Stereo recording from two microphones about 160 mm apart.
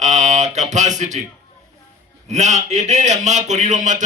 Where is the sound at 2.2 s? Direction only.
45° right (ahead or behind).